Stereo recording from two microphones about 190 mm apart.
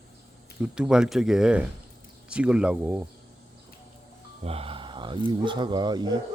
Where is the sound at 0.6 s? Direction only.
5° right (ahead or behind).